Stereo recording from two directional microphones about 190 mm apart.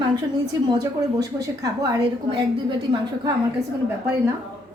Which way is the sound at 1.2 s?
20° right (ahead or behind).